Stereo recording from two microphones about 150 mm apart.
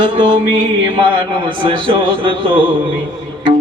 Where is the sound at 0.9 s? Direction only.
35° right (ahead or behind).